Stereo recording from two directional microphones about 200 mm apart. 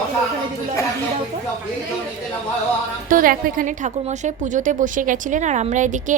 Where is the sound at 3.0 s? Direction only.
45° right (ahead or behind).